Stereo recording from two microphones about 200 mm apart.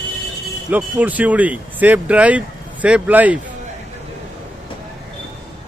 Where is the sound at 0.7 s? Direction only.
5° right (ahead or behind).